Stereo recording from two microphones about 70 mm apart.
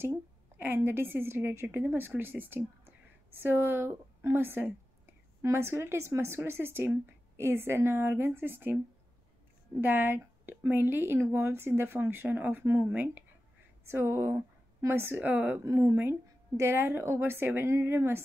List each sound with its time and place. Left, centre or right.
0.6 s speech: right
9.8 s speech: right
15.8 s speech: right